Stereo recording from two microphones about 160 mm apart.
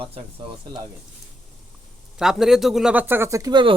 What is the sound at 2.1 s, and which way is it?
Speech, 5° right (ahead or behind).